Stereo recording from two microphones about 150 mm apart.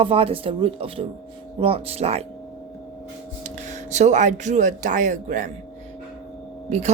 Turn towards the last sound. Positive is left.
turn(degrees=-50)  # may be behind; listen again after turning